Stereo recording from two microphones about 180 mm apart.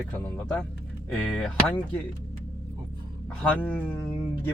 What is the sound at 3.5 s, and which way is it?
Speech, 10° left (ahead or behind).